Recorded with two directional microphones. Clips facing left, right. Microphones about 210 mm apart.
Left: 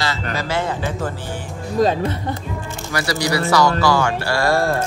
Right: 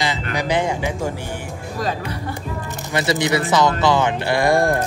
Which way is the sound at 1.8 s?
25° left (ahead or behind).